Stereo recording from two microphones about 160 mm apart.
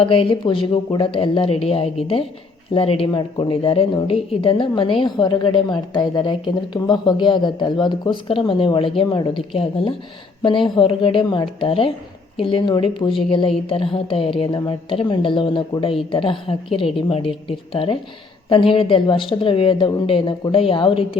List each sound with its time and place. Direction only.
0.0 s a woman's voice: 35° left (ahead or behind)